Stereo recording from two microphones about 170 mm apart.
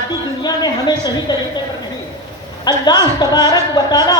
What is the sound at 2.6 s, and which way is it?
A man's voice, 25° left (ahead or behind).